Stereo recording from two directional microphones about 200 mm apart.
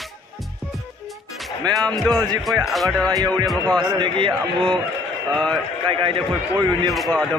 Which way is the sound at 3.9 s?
25° right (ahead or behind).